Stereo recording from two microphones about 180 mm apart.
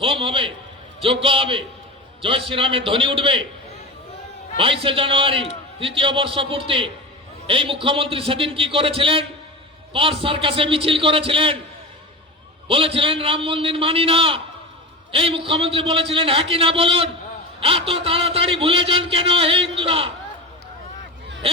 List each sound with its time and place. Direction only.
0.0 s a man's voice: 30° right (ahead or behind)
4.5 s a man's voice: 30° right (ahead or behind)
12.6 s a man's voice: 30° right (ahead or behind)